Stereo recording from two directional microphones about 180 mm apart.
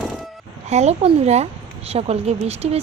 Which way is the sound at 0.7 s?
35° right (ahead or behind).